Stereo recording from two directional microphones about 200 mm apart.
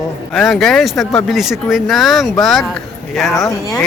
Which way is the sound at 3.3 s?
15° left (ahead or behind).